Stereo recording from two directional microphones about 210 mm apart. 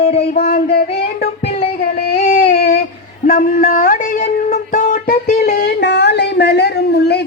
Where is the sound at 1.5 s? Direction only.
30° left (ahead or behind).